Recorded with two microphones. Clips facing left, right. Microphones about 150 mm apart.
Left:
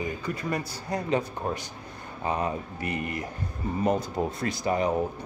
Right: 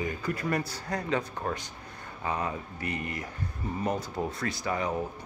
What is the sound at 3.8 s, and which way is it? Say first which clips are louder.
Speech: left 5 dB; 20° left (ahead or behind).